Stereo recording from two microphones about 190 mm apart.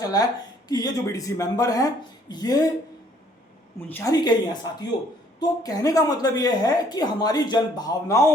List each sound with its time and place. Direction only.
0.0 s a woman's voice: 20° left (ahead or behind)
3.8 s a woman's voice: 15° left (ahead or behind)